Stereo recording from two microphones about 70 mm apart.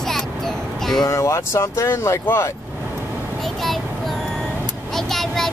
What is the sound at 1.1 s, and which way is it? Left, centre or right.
Speech, left.